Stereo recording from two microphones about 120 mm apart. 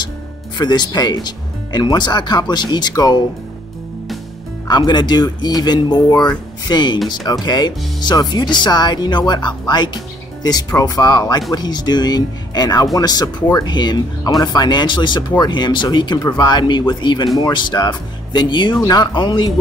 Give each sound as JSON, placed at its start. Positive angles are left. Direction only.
{"t": 0.6, "sound": "speech", "side_deg": 35}
{"t": 4.6, "sound": "speech", "side_deg": 40}